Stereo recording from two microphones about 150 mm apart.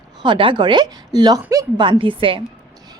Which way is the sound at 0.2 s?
35° right (ahead or behind).